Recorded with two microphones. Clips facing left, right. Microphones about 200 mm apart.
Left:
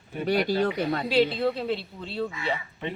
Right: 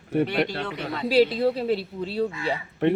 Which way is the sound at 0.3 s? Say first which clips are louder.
Left 3 dB; 40° left (ahead or behind).